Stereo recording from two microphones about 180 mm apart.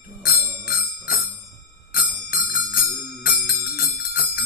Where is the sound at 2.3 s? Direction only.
55° left (ahead or behind).